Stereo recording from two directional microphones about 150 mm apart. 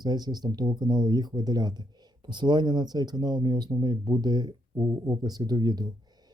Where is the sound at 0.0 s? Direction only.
30° right (ahead or behind).